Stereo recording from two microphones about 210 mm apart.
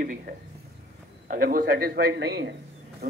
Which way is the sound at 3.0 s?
50° right (ahead or behind).